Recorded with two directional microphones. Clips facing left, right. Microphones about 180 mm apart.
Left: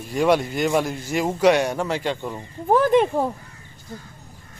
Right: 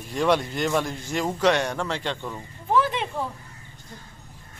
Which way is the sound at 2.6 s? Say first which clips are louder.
Left 7 dB; 50° left (ahead or behind).